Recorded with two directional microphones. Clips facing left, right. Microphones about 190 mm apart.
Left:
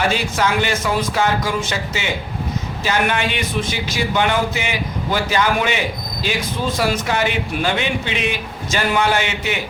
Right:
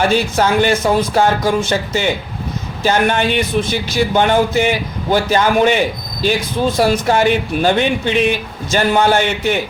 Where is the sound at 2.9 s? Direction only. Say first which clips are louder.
Right 5 dB; 35° right (ahead or behind).